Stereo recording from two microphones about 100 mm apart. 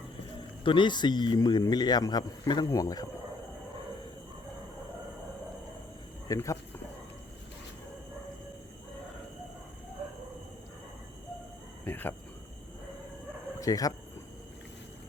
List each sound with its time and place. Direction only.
0.6 s a man's voice: 55° left (ahead or behind); by 3.1 s 35° left (ahead or behind)
6.2 s speech: 30° left (ahead or behind)
11.9 s cricket: 20° left (ahead or behind)
13.6 s speech: 35° left (ahead or behind)